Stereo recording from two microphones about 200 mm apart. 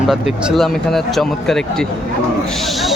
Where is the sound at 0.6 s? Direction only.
Centre (ahead or behind).